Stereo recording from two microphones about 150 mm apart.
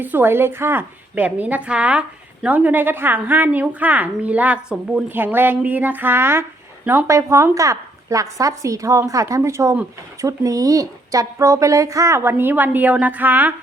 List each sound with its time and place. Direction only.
0.0 s a woman's voice: 15° right (ahead or behind)